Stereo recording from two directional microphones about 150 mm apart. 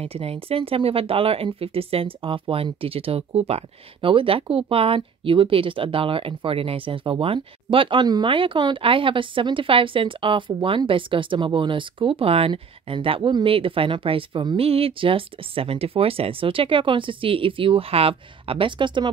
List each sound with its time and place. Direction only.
0.0 s speech: 40° right (ahead or behind)